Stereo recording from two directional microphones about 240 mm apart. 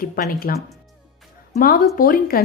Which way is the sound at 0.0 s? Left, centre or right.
Left.